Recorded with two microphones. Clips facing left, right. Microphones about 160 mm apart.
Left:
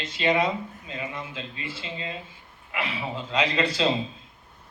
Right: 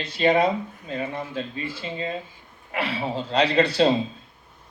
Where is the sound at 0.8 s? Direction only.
50° right (ahead or behind).